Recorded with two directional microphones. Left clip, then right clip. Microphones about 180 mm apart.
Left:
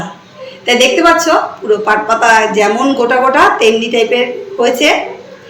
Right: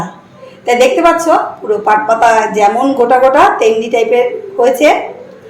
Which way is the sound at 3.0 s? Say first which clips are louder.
Right 2 dB; 50° right (ahead or behind).